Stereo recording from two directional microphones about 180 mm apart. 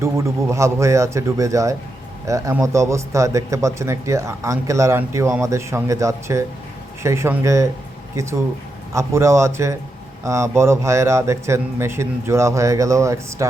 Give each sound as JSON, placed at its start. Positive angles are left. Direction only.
{"t": 0.0, "sound": "a man's voice", "side_deg": -15}